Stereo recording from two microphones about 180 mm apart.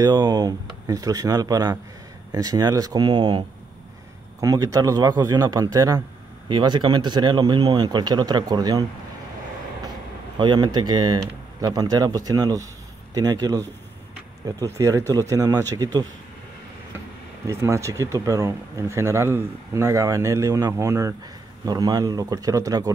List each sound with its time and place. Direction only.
0.0 s speech: 25° right (ahead or behind)
10.4 s speech: 25° right (ahead or behind)
17.5 s speech: 15° right (ahead or behind)